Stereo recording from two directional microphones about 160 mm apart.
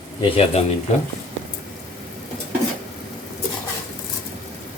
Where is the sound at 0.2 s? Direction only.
35° left (ahead or behind).